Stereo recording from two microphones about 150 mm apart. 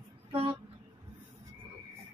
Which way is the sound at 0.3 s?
35° right (ahead or behind).